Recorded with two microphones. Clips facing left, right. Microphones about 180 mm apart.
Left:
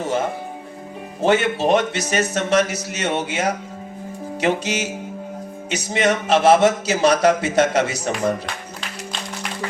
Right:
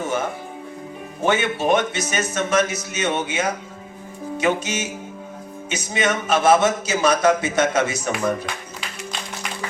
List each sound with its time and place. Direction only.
0.0 s music: 35° left (ahead or behind)
1.2 s a man's voice: 35° left (ahead or behind)